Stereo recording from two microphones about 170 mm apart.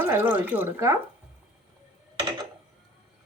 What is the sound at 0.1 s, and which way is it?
Speech, 10° right (ahead or behind).